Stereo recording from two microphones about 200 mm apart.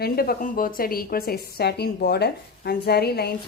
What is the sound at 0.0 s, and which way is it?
A woman's voice, 50° left (ahead or behind).